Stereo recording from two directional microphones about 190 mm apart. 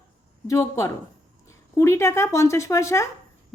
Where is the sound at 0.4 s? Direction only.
15° left (ahead or behind).